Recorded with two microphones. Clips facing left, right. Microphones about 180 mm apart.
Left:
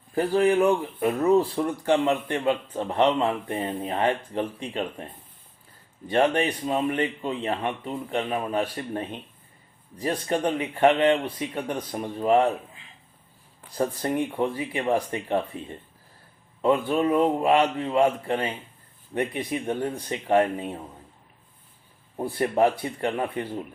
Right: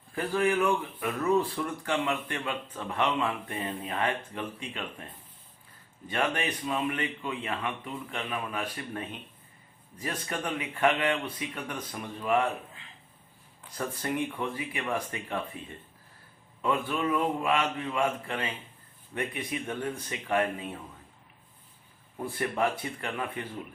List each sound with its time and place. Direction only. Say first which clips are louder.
0.2 s speech: left 6 dB; 35° left (ahead or behind)
6.1 s speech: left 8 dB; 30° left (ahead or behind)
13.7 s speech: left 6 dB; 35° left (ahead or behind)
16.6 s speech: left 7 dB; 35° left (ahead or behind)
22.2 s speech: left 7 dB; 35° left (ahead or behind)